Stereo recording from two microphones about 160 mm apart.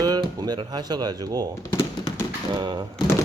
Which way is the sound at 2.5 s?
25° right (ahead or behind).